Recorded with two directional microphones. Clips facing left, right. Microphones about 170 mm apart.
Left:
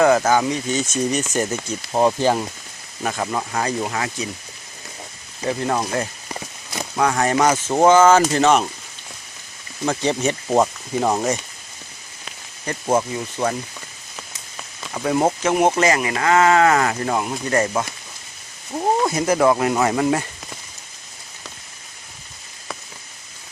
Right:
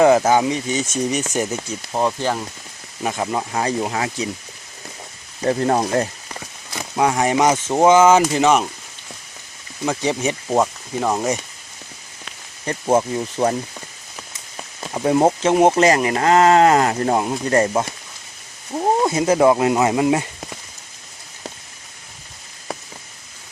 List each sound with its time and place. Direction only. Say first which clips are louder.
0.0 s speech: right 2 dB; 25° right (ahead or behind)
1.9 s speech: left 3 dB; 10° left (ahead or behind)
3.0 s speech: right 1 dB; 15° right (ahead or behind)
5.5 s speech: right 4 dB; 35° right (ahead or behind)
6.9 s speech: right 1 dB; 20° right (ahead or behind)
9.8 s speech: even; 10° right (ahead or behind)
10.6 s speech: left 1 dB; 5° left (ahead or behind)
12.8 s speech: right 2 dB; 10° right (ahead or behind)
13.1 s speech: right 3 dB; 25° right (ahead or behind)
14.9 s speech: right 3 dB; 20° right (ahead or behind)
18.7 s speech: right 1 dB; 10° right (ahead or behind)
19.0 s speech: right 3 dB; 25° right (ahead or behind)